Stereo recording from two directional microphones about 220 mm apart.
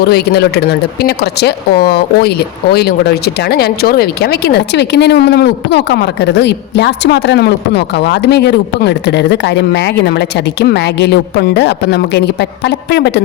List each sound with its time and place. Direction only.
0.0 s speech: 45° left (ahead or behind)